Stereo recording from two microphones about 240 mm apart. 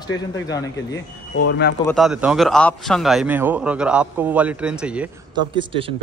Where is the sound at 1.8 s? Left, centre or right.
Centre.